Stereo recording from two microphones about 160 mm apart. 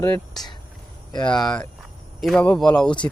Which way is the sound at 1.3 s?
5° left (ahead or behind).